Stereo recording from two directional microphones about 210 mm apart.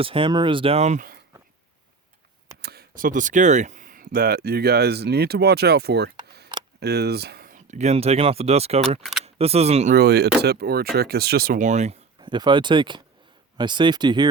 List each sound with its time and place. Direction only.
0.0 s speech: 25° right (ahead or behind); by 1.2 s 40° right (ahead or behind)
2.6 s speech: 50° right (ahead or behind); by 9.9 s 30° right (ahead or behind)
9.9 s speech: 50° right (ahead or behind); by 14.3 s 20° right (ahead or behind)